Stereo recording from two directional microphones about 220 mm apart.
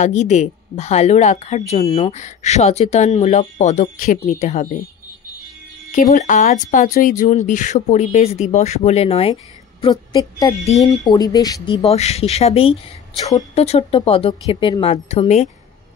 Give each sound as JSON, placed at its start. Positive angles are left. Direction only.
{"t": 0.0, "sound": "speech", "side_deg": 35}
{"t": 5.9, "sound": "a woman's voice", "side_deg": 35}